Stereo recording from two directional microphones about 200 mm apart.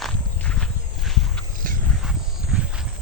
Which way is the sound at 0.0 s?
5° left (ahead or behind).